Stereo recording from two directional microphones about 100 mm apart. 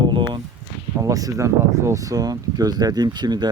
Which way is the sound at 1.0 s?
35° right (ahead or behind).